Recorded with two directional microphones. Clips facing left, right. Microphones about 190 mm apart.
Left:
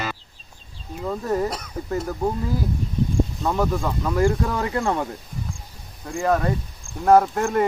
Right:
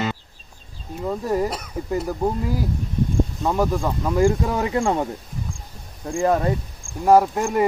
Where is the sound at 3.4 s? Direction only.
10° right (ahead or behind).